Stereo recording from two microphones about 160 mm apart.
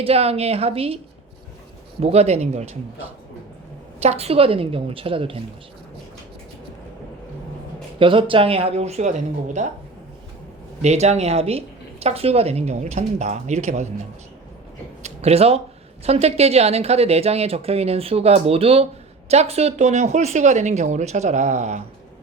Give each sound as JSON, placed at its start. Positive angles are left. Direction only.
{"t": 0.0, "sound": "speech", "side_deg": -40}
{"t": 2.0, "sound": "a woman's voice", "side_deg": -40}
{"t": 4.0, "sound": "speech", "side_deg": -40}
{"t": 7.9, "sound": "speech", "side_deg": -35}
{"t": 10.8, "sound": "a woman's voice", "side_deg": -45}
{"t": 15.0, "sound": "a woman's voice", "side_deg": -40}